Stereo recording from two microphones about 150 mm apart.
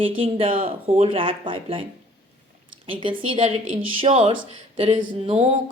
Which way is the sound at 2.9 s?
35° right (ahead or behind).